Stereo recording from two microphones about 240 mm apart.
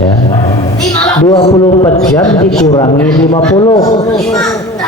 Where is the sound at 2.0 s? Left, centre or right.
Centre.